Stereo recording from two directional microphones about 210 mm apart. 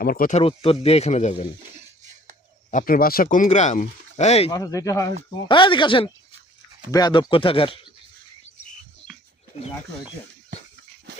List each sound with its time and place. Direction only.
0.0 s speech: 45° left (ahead or behind)
2.6 s speech: 40° left (ahead or behind)
4.5 s speech: 15° left (ahead or behind)
9.5 s speech: 30° left (ahead or behind)